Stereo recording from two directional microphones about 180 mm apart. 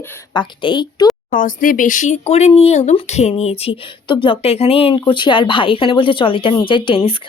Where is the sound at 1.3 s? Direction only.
50° left (ahead or behind).